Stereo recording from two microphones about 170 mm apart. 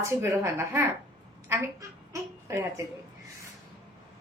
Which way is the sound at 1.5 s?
15° right (ahead or behind).